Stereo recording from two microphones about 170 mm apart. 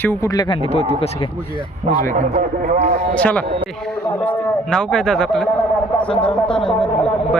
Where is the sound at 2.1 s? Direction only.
45° right (ahead or behind).